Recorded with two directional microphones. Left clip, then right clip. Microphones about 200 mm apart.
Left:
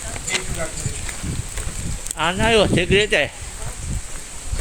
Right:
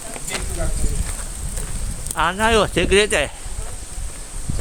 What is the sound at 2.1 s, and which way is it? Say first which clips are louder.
Speech: right 1 dB; 10° right (ahead or behind).